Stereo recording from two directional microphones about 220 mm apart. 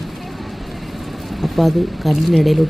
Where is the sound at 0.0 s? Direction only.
Centre (ahead or behind).